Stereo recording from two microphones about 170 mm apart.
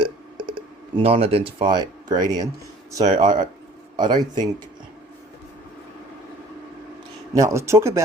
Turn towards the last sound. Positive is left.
turn(degrees=-15)  # may be behind; listen again after turning